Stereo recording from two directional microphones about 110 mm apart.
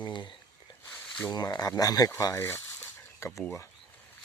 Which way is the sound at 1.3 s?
35° left (ahead or behind).